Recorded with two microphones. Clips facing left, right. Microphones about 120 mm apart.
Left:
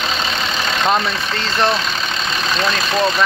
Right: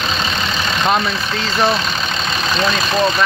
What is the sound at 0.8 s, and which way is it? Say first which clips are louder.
Speech: even; centre (ahead or behind).